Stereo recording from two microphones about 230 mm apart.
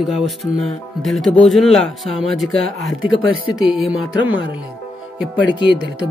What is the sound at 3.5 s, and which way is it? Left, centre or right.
Speech, centre.